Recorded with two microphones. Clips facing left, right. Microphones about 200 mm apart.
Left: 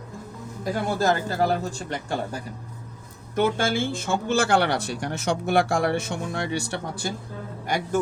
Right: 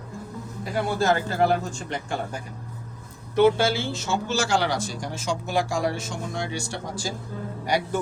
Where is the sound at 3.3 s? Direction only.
50° left (ahead or behind).